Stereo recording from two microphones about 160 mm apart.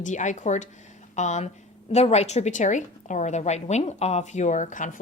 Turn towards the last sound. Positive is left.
turn(degrees=50)  # may be behind; listen again after turning